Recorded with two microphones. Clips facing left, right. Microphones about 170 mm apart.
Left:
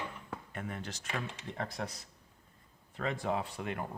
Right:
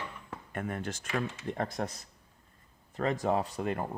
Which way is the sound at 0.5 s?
50° right (ahead or behind).